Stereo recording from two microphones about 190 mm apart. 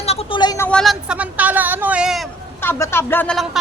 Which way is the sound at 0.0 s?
30° left (ahead or behind).